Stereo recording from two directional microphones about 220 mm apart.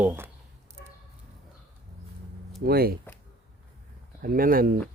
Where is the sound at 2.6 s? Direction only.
45° right (ahead or behind).